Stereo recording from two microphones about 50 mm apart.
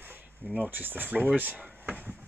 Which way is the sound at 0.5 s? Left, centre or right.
Right.